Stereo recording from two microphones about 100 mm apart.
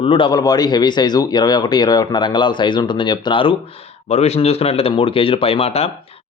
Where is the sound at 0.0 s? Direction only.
65° left (ahead or behind).